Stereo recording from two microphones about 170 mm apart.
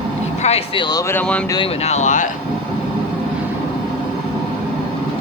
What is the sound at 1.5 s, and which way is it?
Speech, 30° left (ahead or behind).